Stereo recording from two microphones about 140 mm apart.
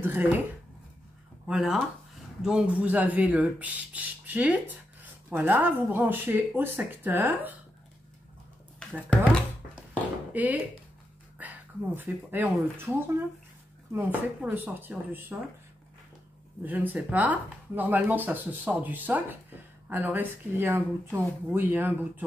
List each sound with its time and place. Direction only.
0.0 s speech: 15° right (ahead or behind)
1.5 s speech: 5° right (ahead or behind)
8.8 s a sound: 5° left (ahead or behind)
10.3 s speech: 10° right (ahead or behind)
13.9 s speech: 15° right (ahead or behind)
16.6 s speech: 10° right (ahead or behind)